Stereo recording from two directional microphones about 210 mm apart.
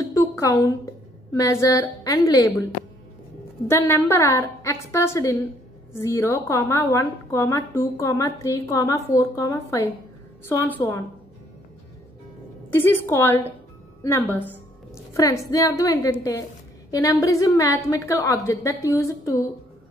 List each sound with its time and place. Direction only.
0.1 s a sound: 15° left (ahead or behind)
1.3 s a woman's voice: 15° left (ahead or behind)
3.6 s a woman's voice: 10° left (ahead or behind)
12.7 s a woman's voice: 10° left (ahead or behind)